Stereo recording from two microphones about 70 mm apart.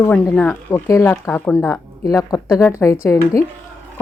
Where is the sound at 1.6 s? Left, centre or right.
Left.